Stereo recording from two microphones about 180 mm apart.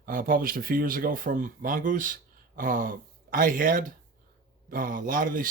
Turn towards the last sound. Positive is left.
turn(degrees=-50)  # may be behind; listen again after turning